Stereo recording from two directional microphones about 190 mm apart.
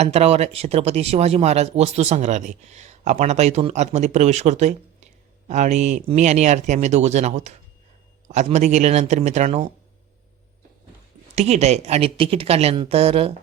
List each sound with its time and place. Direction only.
0.0 s speech: 35° right (ahead or behind)
11.3 s speech: 35° right (ahead or behind)